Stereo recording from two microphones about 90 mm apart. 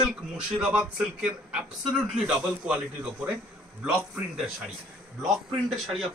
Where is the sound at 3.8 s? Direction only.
5° right (ahead or behind).